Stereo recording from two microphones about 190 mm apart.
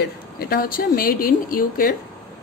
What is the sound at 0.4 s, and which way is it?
A woman's voice, 50° left (ahead or behind).